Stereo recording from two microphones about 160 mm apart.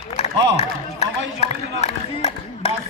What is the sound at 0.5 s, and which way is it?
Run, 40° left (ahead or behind).